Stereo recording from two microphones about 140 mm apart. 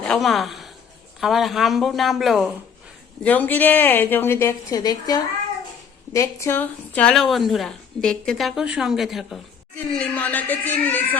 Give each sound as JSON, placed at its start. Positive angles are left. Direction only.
{"t": 0.0, "sound": "a woman's voice", "side_deg": 5}
{"t": 3.2, "sound": "a woman's voice", "side_deg": 15}